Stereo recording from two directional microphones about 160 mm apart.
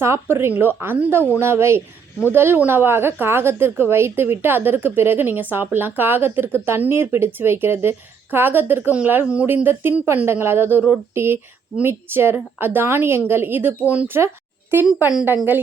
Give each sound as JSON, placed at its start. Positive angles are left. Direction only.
{"t": 0.0, "sound": "a woman's voice", "side_deg": -15}